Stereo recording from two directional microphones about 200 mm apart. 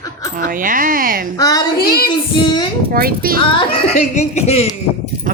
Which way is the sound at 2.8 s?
50° right (ahead or behind).